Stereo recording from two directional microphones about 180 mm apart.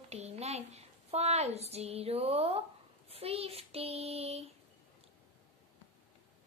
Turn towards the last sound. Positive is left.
turn(degrees=-35)  # may be behind; listen again after turning